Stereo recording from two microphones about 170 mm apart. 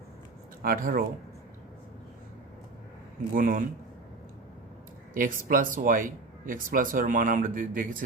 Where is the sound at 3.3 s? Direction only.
55° right (ahead or behind).